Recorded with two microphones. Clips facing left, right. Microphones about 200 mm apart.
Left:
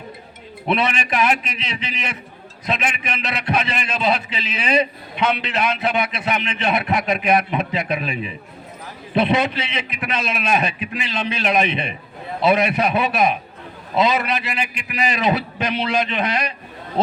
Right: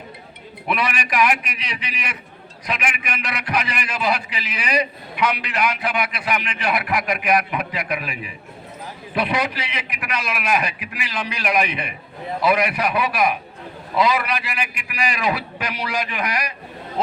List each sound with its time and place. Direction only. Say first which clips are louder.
0.7 s a man's voice: left 3 dB; 25° left (ahead or behind)